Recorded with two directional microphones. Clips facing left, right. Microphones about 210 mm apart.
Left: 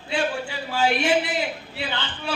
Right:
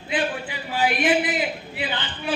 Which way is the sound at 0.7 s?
15° right (ahead or behind).